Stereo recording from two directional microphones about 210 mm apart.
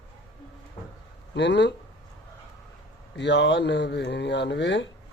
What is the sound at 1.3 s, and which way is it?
Speech, 55° left (ahead or behind).